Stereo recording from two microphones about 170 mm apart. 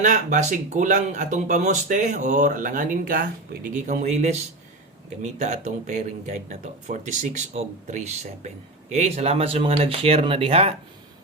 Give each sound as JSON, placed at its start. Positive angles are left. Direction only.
{"t": 0.0, "sound": "speech", "side_deg": -45}